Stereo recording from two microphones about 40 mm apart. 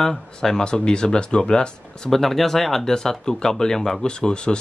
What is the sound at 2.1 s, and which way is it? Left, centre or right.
Speech, centre.